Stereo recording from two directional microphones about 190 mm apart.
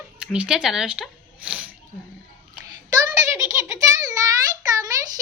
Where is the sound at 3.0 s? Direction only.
15° right (ahead or behind).